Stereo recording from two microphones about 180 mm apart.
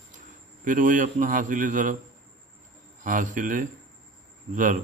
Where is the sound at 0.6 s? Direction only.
45° right (ahead or behind).